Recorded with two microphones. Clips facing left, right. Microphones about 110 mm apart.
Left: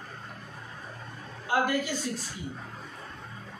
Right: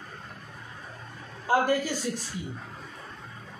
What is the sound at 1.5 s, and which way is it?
Speech, 35° right (ahead or behind).